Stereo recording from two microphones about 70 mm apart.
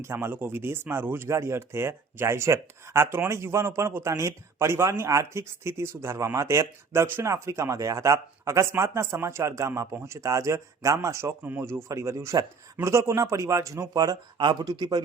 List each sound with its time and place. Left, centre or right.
0.0 s speech: right
13.9 s speech: right